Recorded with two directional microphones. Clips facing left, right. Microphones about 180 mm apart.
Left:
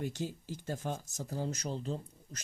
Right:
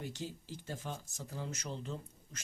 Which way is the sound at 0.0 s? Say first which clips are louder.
Left 5 dB; 50° left (ahead or behind).